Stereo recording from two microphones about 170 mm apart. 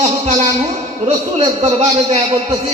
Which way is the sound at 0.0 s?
40° right (ahead or behind).